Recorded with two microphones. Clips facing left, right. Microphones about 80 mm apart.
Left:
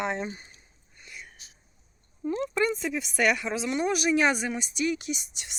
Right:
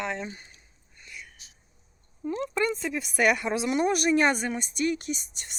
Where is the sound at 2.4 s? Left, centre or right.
Centre.